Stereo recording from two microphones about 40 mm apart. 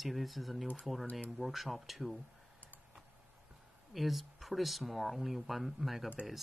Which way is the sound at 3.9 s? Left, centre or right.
Centre.